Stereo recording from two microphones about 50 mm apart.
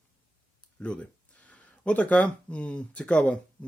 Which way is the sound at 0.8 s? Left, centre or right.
Left.